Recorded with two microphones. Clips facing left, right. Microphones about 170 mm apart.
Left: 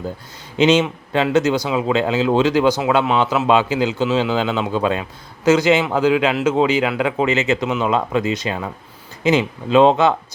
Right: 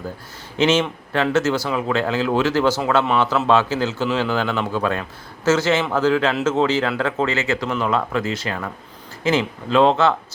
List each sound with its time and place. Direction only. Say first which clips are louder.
0.5 s speech: left 3 dB; 15° left (ahead or behind)